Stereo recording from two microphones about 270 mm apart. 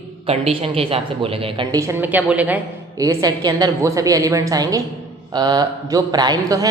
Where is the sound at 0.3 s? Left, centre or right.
Right.